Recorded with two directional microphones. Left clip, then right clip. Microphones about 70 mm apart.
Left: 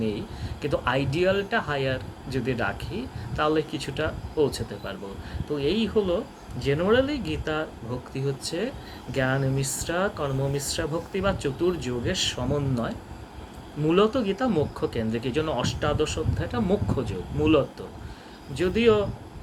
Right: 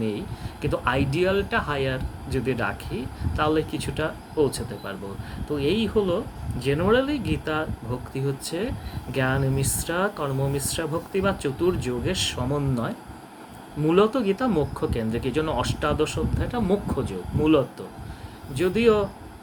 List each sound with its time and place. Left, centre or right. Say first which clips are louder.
0.0 s speech: right 1 dB; right